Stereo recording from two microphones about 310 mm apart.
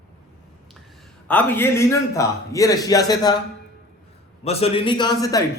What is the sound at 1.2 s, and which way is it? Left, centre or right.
A man's voice, centre.